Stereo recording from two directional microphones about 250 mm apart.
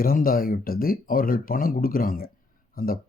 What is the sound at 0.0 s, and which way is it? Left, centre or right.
Speech, left.